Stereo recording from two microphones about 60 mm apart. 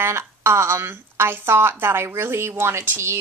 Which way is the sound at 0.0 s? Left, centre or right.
Right.